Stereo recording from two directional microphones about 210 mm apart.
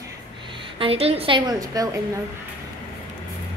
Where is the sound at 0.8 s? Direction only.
30° right (ahead or behind).